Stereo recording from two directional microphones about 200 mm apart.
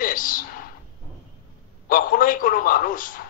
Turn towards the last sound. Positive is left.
turn(degrees=45)  # may be behind; listen again after turning